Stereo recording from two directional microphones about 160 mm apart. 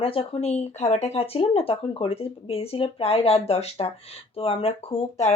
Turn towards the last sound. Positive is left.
turn(degrees=40)  # may be behind; listen again after turning